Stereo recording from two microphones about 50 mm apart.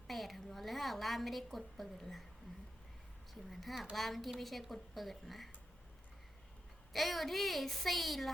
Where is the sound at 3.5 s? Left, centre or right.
Centre.